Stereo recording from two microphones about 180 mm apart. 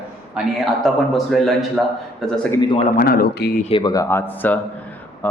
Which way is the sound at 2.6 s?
25° left (ahead or behind).